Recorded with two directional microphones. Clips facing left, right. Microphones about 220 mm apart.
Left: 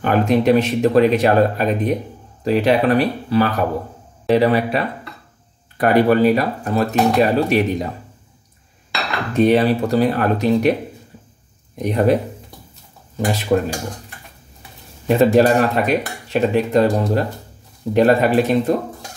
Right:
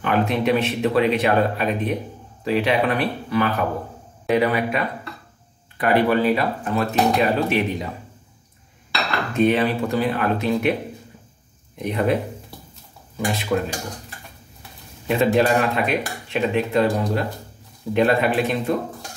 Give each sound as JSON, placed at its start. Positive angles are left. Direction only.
{"t": 0.0, "sound": "speech", "side_deg": 40}
{"t": 9.4, "sound": "speech", "side_deg": 35}
{"t": 11.7, "sound": "speech", "side_deg": 40}
{"t": 13.2, "sound": "speech", "side_deg": 40}
{"t": 15.0, "sound": "speech", "side_deg": 40}